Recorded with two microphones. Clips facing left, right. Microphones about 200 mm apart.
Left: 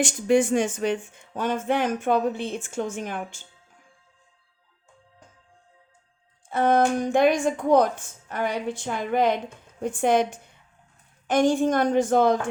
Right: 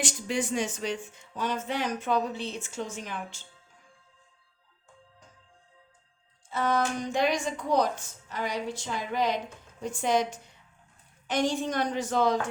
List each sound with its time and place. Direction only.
0.0 s speech: 50° left (ahead or behind)
6.5 s a woman's voice: 55° left (ahead or behind)